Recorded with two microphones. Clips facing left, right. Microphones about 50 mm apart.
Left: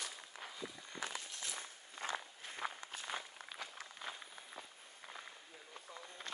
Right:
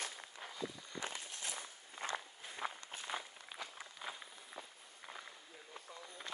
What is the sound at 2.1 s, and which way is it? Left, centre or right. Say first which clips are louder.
Walk: even; centre.